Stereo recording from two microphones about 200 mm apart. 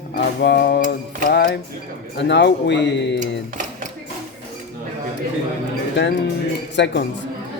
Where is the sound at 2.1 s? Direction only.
60° left (ahead or behind).